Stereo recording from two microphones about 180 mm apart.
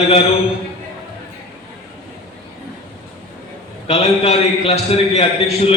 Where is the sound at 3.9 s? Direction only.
35° left (ahead or behind).